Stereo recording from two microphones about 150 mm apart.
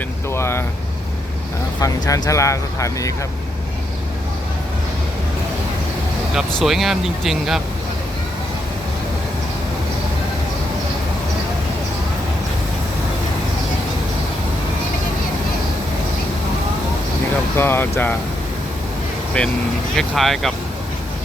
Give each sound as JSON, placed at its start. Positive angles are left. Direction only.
{"t": 0.3, "sound": "speech", "side_deg": 15}
{"t": 1.8, "sound": "speech", "side_deg": 20}
{"t": 6.3, "sound": "speech", "side_deg": 0}
{"t": 17.6, "sound": "speech", "side_deg": 15}
{"t": 19.3, "sound": "speech", "side_deg": 10}